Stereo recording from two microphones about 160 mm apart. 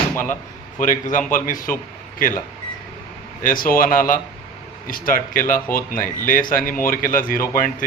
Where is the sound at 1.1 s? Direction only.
55° left (ahead or behind).